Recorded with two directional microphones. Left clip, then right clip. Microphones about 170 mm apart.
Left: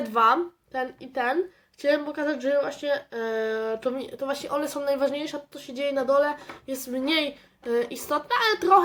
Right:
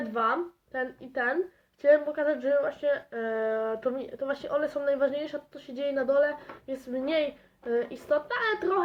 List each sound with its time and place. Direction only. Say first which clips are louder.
0.1 s speech: left 8 dB; 25° left (ahead or behind)
6.7 s speech: left 3 dB; 30° left (ahead or behind)